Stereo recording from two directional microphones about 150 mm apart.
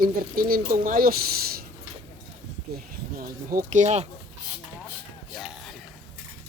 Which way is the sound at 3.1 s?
70° right (ahead or behind).